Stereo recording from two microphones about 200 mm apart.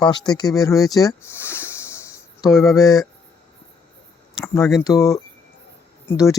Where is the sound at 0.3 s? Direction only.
20° left (ahead or behind).